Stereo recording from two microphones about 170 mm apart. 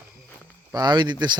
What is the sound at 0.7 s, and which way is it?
Speech, 25° right (ahead or behind).